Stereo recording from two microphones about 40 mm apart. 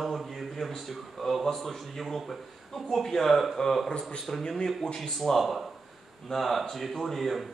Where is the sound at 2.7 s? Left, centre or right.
Centre.